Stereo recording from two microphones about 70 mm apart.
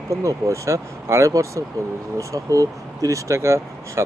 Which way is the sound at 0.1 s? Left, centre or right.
Right.